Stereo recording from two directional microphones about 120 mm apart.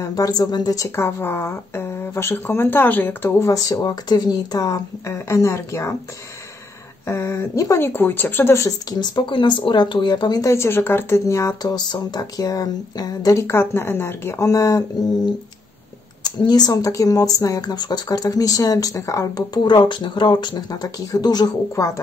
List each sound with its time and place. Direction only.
0.0 s a woman's voice: 30° left (ahead or behind)
7.1 s a woman's voice: 20° left (ahead or behind)
9.0 s speech: 40° left (ahead or behind)
10.5 s a woman's voice: 20° left (ahead or behind)
16.3 s speech: 35° left (ahead or behind)